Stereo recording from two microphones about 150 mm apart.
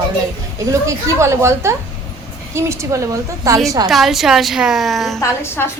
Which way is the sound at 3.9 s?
Centre (ahead or behind).